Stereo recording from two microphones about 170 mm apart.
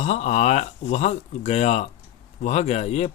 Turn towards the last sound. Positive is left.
turn(degrees=40)  # may be behind; listen again after turning